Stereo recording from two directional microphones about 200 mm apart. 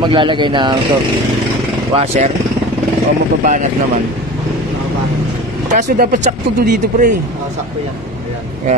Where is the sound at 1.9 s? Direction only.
30° right (ahead or behind).